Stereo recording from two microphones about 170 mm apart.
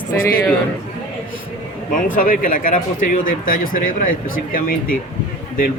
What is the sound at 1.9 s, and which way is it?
Speech, 55° left (ahead or behind).